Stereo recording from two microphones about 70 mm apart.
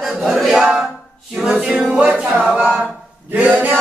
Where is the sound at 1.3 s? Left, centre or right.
Centre.